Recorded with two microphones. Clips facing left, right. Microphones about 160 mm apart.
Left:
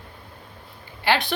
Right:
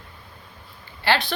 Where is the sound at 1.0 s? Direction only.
15° left (ahead or behind).